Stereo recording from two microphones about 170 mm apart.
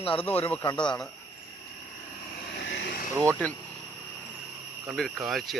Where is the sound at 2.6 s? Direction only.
90° left.